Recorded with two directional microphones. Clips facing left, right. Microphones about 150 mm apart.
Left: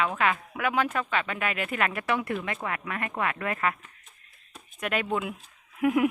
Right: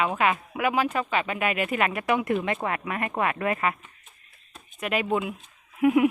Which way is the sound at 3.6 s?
5° right (ahead or behind).